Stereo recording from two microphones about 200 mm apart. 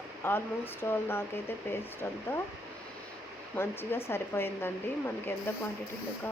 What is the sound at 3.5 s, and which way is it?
Speech, 10° left (ahead or behind).